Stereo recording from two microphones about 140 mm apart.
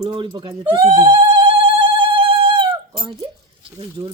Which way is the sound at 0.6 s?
40° right (ahead or behind).